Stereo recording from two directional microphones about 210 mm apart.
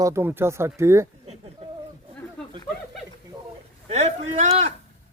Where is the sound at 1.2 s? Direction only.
25° right (ahead or behind).